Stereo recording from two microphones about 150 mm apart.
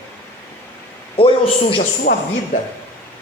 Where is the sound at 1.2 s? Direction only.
35° left (ahead or behind).